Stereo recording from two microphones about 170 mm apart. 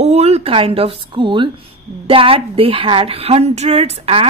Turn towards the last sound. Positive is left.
turn(degrees=-35)  # may be behind; listen again after turning